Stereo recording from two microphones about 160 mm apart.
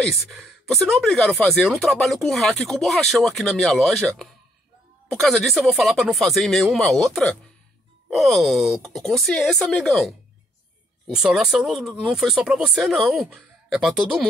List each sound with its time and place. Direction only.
0.0 s speech: centre (ahead or behind)